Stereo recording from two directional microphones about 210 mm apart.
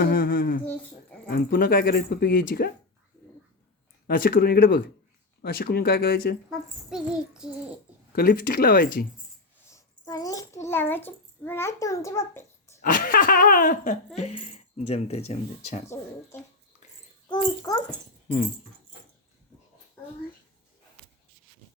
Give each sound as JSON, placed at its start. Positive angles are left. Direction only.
{"t": 0.0, "sound": "a sound", "side_deg": 45}
{"t": 1.3, "sound": "speech", "side_deg": 45}
{"t": 4.0, "sound": "speech", "side_deg": 45}
{"t": 6.5, "sound": "speech", "side_deg": -5}
{"t": 8.1, "sound": "speech", "side_deg": 45}
{"t": 9.6, "sound": "a child's voice", "side_deg": 15}
{"t": 12.8, "sound": "speech", "side_deg": 40}
{"t": 15.9, "sound": "a child's voice", "side_deg": 10}
{"t": 17.2, "sound": "a child's voice", "side_deg": 20}